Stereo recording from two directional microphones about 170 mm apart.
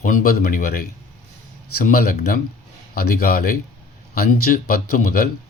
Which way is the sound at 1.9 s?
60° left (ahead or behind).